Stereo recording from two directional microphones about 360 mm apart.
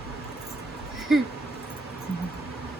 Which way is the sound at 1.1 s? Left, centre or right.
Centre.